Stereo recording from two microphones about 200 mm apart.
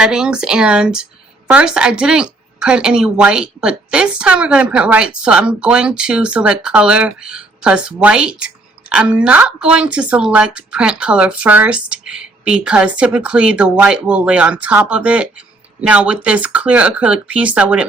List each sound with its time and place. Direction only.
0.0 s a woman's voice: 5° right (ahead or behind)